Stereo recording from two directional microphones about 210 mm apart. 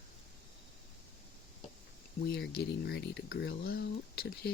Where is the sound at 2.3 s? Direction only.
50° left (ahead or behind).